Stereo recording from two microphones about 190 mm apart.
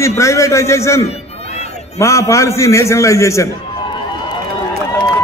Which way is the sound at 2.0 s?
15° left (ahead or behind).